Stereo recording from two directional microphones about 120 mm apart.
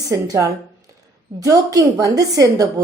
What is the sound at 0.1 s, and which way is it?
A woman's voice, 25° right (ahead or behind).